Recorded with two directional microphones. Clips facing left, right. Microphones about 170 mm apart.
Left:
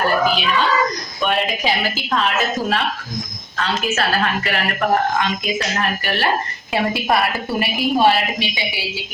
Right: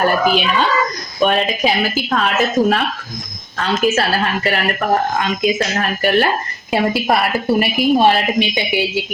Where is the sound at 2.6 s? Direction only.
20° right (ahead or behind).